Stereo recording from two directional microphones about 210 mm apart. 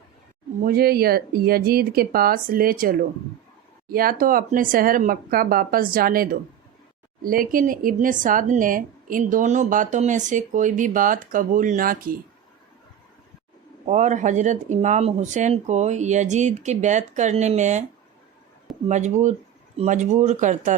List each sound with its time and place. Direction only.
0.6 s speech: 45° right (ahead or behind)
13.8 s speech: 35° right (ahead or behind)
18.9 s speech: 35° right (ahead or behind)